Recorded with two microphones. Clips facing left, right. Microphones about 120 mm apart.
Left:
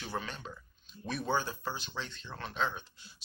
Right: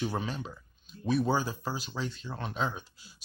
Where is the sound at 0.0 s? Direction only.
20° right (ahead or behind).